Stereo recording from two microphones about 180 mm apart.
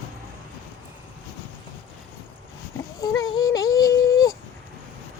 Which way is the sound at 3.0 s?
25° left (ahead or behind).